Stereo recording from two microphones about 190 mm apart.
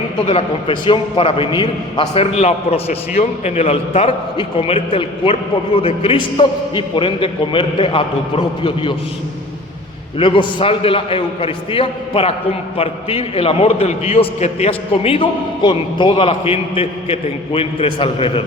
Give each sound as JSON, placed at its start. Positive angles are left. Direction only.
{"t": 0.3, "sound": "a man's voice", "side_deg": 30}
{"t": 10.2, "sound": "a man's voice", "side_deg": 25}